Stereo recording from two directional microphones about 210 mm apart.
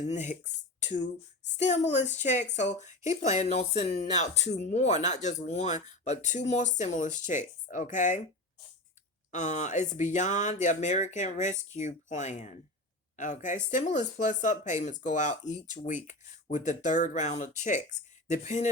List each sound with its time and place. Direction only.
0.0 s speech: 35° left (ahead or behind)
9.3 s speech: 35° left (ahead or behind)